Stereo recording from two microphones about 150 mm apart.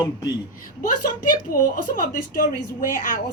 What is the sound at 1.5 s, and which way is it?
A woman's voice, 70° left (ahead or behind).